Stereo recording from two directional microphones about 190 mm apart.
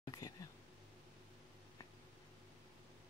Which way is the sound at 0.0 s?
20° left (ahead or behind).